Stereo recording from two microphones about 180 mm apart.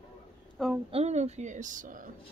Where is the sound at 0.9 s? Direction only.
35° right (ahead or behind).